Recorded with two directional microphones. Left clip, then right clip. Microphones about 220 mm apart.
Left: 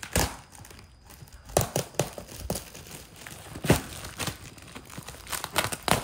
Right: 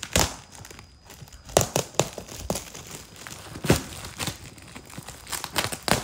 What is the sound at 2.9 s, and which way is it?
Crumpling, 5° right (ahead or behind).